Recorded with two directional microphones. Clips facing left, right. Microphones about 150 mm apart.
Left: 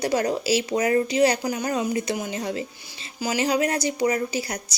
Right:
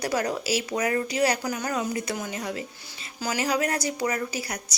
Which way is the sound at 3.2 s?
15° left (ahead or behind).